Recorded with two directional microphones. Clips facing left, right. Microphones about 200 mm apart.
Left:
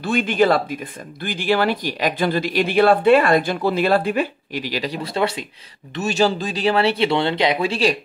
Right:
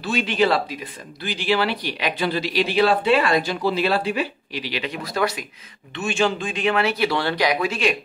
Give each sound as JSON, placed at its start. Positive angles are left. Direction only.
{"t": 0.0, "sound": "speech", "side_deg": 50}
{"t": 5.9, "sound": "speech", "side_deg": 40}